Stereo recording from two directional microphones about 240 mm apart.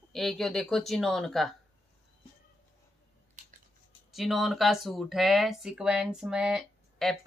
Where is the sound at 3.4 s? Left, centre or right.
Right.